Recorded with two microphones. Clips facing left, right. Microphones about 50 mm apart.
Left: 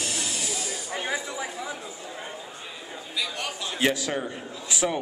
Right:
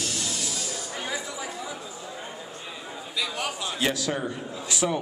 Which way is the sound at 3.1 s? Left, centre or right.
Centre.